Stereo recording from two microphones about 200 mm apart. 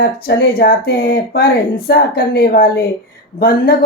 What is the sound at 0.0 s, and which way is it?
Speech, 55° left (ahead or behind).